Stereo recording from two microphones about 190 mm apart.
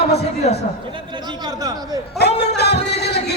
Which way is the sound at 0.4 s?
35° left (ahead or behind).